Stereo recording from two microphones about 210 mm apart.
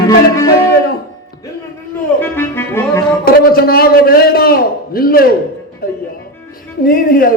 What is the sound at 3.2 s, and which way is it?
A man's voice, 45° left (ahead or behind).